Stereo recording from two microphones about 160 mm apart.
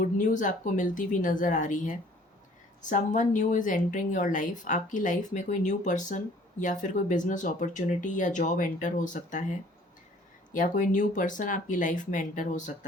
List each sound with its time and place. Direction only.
0.0 s a woman's voice: 50° left (ahead or behind)